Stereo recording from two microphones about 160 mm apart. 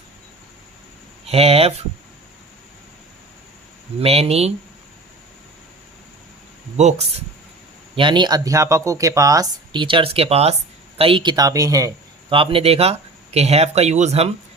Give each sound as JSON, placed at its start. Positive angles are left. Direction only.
{"t": 1.3, "sound": "speech", "side_deg": -40}
{"t": 4.0, "sound": "speech", "side_deg": -40}
{"t": 6.7, "sound": "speech", "side_deg": -45}
{"t": 7.9, "sound": "speech", "side_deg": -30}
{"t": 9.8, "sound": "speech", "side_deg": -35}
{"t": 12.3, "sound": "speech", "side_deg": -35}